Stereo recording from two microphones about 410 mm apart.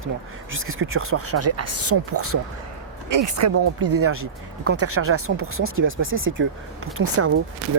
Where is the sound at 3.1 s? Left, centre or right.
Right.